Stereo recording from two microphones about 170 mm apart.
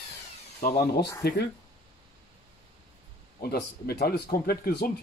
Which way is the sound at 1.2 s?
70° left (ahead or behind).